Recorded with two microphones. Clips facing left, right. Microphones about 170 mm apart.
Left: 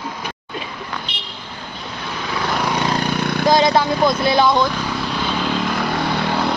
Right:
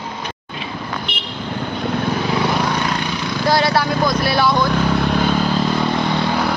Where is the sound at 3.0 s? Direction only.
55° left (ahead or behind).